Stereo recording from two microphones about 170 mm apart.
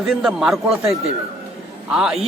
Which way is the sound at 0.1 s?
Centre (ahead or behind).